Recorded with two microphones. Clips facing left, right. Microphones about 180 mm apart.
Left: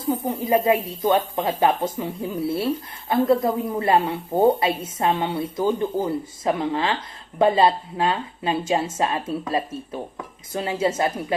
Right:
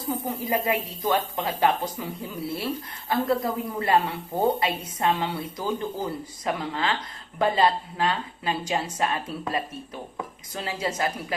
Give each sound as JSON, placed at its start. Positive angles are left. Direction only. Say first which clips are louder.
{"t": 0.4, "sound": "speech", "louder": "left 7 dB", "side_deg": 25}